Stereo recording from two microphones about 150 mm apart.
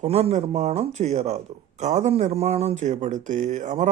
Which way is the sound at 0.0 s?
45° right (ahead or behind).